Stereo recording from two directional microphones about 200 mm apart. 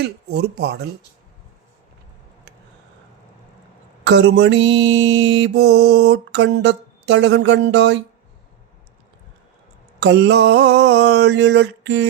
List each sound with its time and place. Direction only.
0.0 s speech: 55° right (ahead or behind)
4.0 s mantra: 60° right (ahead or behind)
10.0 s mantra: 60° right (ahead or behind)